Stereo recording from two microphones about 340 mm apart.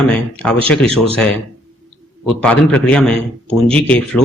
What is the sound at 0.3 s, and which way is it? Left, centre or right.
Speech, centre.